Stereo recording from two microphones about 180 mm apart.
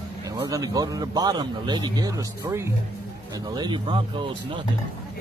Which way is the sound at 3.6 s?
25° right (ahead or behind).